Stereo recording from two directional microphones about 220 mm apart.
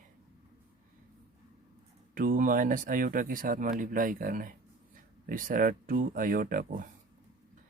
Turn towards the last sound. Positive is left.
turn(degrees=-40)  # may be behind; listen again after turning